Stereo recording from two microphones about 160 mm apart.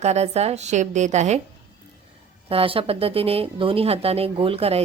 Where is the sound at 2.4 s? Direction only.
35° right (ahead or behind).